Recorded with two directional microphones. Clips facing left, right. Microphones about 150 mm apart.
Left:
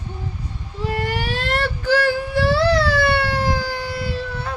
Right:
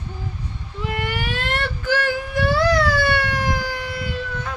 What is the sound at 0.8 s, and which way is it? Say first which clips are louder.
Whimper: left 3 dB; 35° left (ahead or behind).